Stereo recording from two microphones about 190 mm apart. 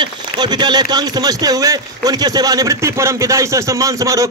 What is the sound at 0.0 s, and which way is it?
A man's voice, 20° right (ahead or behind).